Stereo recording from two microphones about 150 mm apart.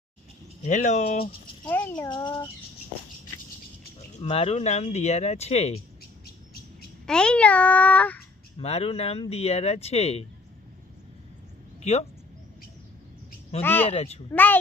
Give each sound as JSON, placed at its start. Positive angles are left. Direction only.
{"t": 0.6, "sound": "speech", "side_deg": 55}
{"t": 1.6, "sound": "speech", "side_deg": 10}
{"t": 2.0, "sound": "speech", "side_deg": 30}
{"t": 4.2, "sound": "speech", "side_deg": 40}
{"t": 7.1, "sound": "a child's voice", "side_deg": 5}
{"t": 8.5, "sound": "speech", "side_deg": 40}
{"t": 11.8, "sound": "speech", "side_deg": 45}
{"t": 13.6, "sound": "a child's voice", "side_deg": 15}
{"t": 13.8, "sound": "speech", "side_deg": 40}
{"t": 14.3, "sound": "a child's voice", "side_deg": 10}